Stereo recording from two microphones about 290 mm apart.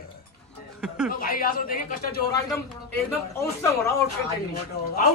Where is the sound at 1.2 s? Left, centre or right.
Left.